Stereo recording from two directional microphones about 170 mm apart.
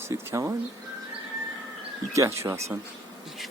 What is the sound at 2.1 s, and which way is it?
Speech, 15° right (ahead or behind).